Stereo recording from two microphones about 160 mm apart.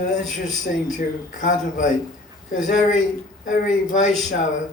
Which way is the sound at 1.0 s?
55° left (ahead or behind).